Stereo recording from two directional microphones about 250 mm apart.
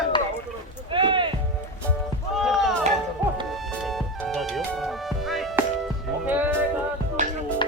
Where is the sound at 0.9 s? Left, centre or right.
Centre.